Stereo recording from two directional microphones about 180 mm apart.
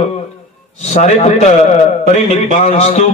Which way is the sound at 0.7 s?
40° left (ahead or behind).